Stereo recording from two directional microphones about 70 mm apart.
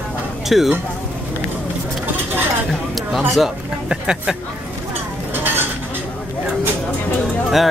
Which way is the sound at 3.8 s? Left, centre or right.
Centre.